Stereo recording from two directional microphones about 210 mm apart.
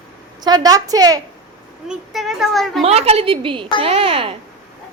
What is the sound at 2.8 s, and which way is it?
A woman's voice, 30° right (ahead or behind).